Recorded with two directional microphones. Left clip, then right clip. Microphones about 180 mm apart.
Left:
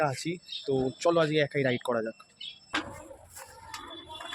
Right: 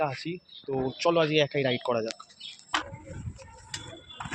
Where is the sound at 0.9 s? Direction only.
15° left (ahead or behind).